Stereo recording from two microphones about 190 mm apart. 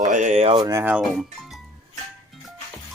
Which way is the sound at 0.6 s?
10° right (ahead or behind).